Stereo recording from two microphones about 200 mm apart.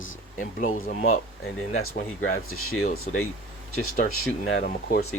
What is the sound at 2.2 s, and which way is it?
Speech, 90° left.